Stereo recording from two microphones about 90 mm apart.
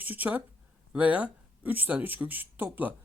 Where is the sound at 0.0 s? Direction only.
20° right (ahead or behind).